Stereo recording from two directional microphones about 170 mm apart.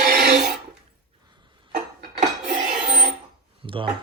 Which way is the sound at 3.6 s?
30° right (ahead or behind).